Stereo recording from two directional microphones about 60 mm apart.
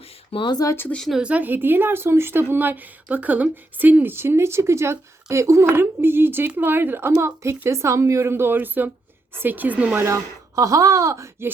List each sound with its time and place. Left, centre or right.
0.5 s speech: left
1.2 s speech: right
5.7 s speech: right
8.3 s a woman's voice: right
10.5 s a sound: right